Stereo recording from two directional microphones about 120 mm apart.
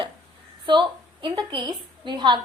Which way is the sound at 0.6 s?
40° right (ahead or behind).